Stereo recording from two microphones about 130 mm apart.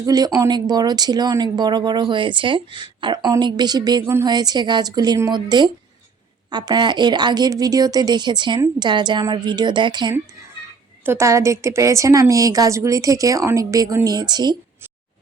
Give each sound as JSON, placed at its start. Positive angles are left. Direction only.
{"t": 0.0, "sound": "speech", "side_deg": -30}
{"t": 11.0, "sound": "a woman's voice", "side_deg": -20}